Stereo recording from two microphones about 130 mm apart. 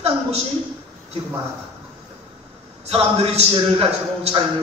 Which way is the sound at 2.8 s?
50° right (ahead or behind).